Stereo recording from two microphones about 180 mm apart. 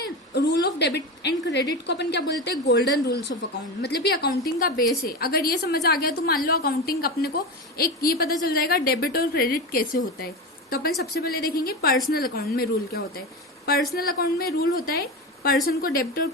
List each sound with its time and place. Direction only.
0.3 s a woman's voice: 70° left (ahead or behind)